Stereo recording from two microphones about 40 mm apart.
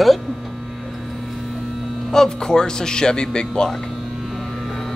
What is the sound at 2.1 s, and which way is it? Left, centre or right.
Speech, centre.